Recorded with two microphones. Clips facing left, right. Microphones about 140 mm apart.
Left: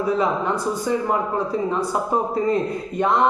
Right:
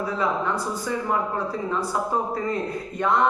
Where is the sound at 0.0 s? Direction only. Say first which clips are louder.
Left 4 dB; 20° left (ahead or behind).